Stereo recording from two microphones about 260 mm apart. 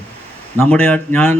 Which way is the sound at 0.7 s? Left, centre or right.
Centre.